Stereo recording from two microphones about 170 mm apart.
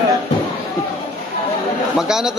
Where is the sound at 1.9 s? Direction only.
5° right (ahead or behind).